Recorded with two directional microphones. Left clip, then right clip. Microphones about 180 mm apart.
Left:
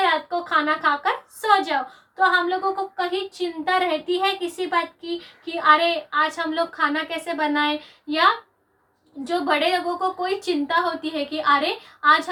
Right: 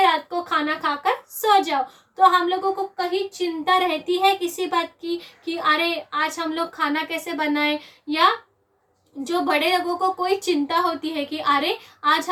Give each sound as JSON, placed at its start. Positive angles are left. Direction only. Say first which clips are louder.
{"t": 0.0, "sound": "a sound", "louder": "right 2 dB", "side_deg": -15}
{"t": 2.1, "sound": "a woman's voice", "louder": "right 2 dB", "side_deg": -15}
{"t": 9.2, "sound": "a woman's voice", "louder": "even", "side_deg": -20}